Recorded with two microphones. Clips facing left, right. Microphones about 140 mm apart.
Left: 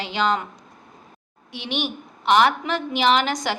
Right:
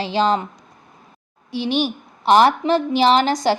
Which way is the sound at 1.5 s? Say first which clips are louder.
Right 7 dB; 35° right (ahead or behind).